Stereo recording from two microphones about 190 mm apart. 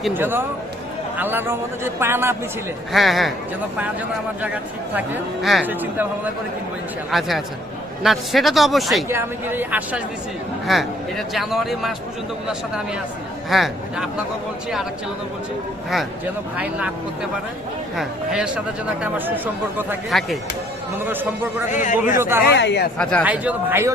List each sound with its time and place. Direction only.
0.1 s speech: 10° right (ahead or behind)
2.9 s speech: centre (ahead or behind)
4.4 s speech: 5° right (ahead or behind)
7.1 s speech: centre (ahead or behind)
9.0 s speech: 10° right (ahead or behind)
16.6 s speech: 5° right (ahead or behind)
17.9 s speech: centre (ahead or behind)
21.0 s speech: 10° right (ahead or behind)
21.7 s a man's voice: 40° left (ahead or behind)
22.2 s speech: 10° right (ahead or behind)
22.4 s speech: 65° left (ahead or behind)
23.0 s speech: 5° left (ahead or behind)
23.2 s speech: 10° right (ahead or behind)